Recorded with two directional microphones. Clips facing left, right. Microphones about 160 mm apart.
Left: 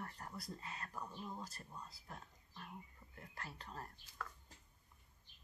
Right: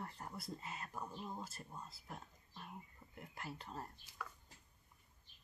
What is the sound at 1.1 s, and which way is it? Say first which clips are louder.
Speech: right 1 dB; 15° right (ahead or behind).